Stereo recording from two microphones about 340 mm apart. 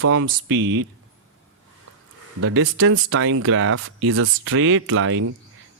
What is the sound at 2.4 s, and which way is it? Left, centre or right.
Speech, right.